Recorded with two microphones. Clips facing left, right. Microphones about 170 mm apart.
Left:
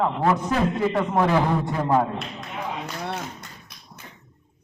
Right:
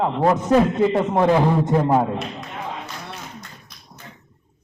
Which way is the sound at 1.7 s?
20° right (ahead or behind).